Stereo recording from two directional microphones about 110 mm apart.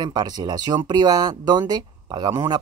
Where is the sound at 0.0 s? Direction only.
40° right (ahead or behind).